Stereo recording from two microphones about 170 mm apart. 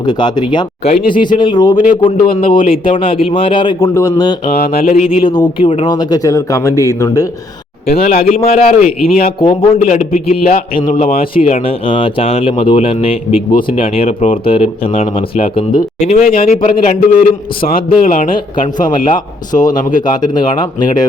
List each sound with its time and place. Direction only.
0.0 s speech: 25° left (ahead or behind)
3.8 s speech: 15° left (ahead or behind)
4.5 s a sound: 65° left (ahead or behind)
4.9 s a man's voice: 5° right (ahead or behind)
5.2 s speech: 25° left (ahead or behind)
7.9 s a sound: 60° left (ahead or behind)
8.2 s speech: 35° left (ahead or behind)
9.0 s a sound: 60° left (ahead or behind)
9.4 s speech: 30° left (ahead or behind)
9.7 s a man's voice: 50° left (ahead or behind)
10.9 s speech: 35° left (ahead or behind)
16.3 s a sound: 60° left (ahead or behind)
16.6 s a man's voice: 45° left (ahead or behind)
19.0 s speech: 25° left (ahead or behind)